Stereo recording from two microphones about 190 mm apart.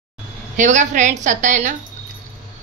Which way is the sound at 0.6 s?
40° right (ahead or behind).